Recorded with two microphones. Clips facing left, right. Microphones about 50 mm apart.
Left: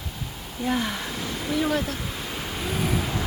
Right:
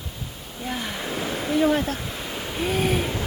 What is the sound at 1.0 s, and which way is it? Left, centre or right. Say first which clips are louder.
Speech: right 3 dB; centre.